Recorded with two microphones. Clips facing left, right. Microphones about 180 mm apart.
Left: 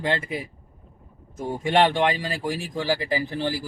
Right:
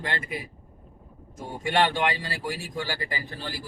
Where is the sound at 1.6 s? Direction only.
20° left (ahead or behind).